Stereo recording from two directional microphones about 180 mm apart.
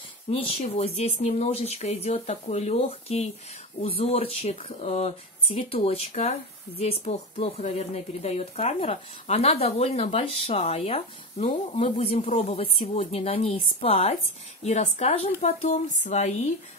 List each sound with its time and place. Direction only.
0.3 s a woman's voice: 35° left (ahead or behind)